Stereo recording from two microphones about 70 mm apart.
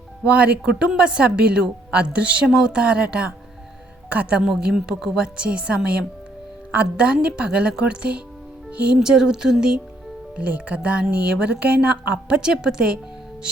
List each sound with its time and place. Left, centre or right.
0.3 s speech: centre
9.0 s speech: centre